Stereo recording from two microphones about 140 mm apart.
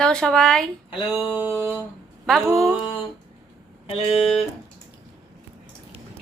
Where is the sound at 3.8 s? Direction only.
45° left (ahead or behind).